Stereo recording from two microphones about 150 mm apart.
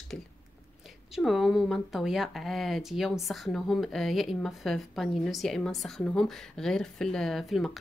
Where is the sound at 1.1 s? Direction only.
Centre (ahead or behind).